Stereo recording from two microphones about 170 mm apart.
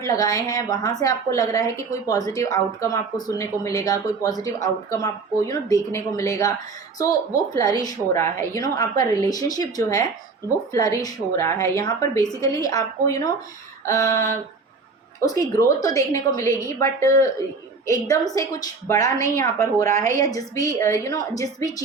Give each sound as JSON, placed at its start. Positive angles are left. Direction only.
{"t": 0.0, "sound": "a woman's voice", "side_deg": 20}